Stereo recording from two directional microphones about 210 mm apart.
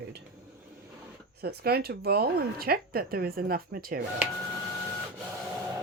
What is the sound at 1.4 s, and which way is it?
Speech, 50° right (ahead or behind).